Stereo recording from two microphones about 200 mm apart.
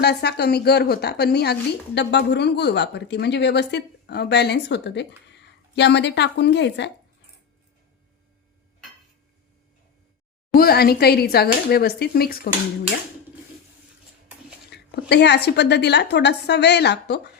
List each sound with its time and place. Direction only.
0.0 s a woman's voice: 55° left (ahead or behind)
10.5 s speech: 50° left (ahead or behind)
14.7 s a sound: 55° left (ahead or behind)
15.1 s a woman's voice: 55° left (ahead or behind)